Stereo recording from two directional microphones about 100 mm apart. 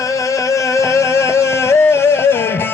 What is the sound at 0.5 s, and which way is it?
Music, 30° left (ahead or behind).